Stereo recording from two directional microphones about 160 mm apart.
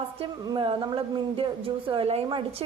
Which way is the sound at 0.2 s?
35° right (ahead or behind).